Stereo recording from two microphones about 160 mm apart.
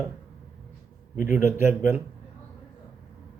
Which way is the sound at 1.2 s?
15° right (ahead or behind).